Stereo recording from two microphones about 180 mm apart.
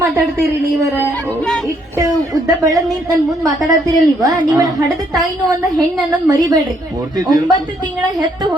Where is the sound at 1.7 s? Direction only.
15° right (ahead or behind).